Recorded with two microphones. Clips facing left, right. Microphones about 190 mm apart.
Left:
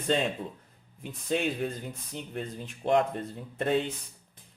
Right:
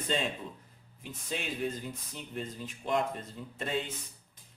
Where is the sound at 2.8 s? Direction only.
60° left (ahead or behind).